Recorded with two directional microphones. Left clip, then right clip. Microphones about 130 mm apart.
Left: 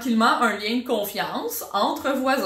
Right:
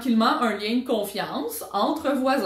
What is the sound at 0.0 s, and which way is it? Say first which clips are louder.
Speech: left 2 dB; 15° right (ahead or behind).